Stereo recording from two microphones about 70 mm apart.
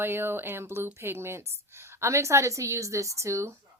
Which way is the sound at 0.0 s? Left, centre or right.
Right.